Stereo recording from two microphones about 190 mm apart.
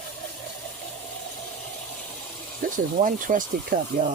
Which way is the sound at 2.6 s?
45° right (ahead or behind).